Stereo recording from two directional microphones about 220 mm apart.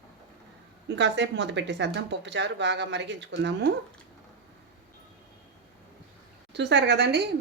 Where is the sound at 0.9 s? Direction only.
55° right (ahead or behind).